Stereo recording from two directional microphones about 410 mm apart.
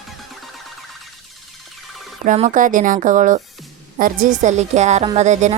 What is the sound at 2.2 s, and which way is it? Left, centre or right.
A woman's voice, centre.